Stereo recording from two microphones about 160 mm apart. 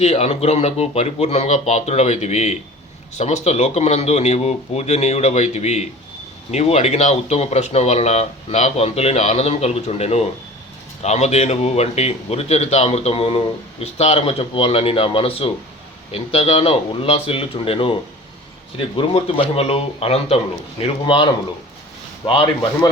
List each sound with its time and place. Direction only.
0.0 s speech: 40° left (ahead or behind)
22.3 s speech: 35° left (ahead or behind)